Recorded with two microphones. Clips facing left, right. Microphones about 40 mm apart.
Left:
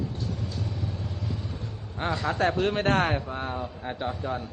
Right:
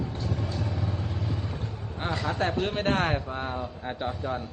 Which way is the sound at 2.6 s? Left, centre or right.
Centre.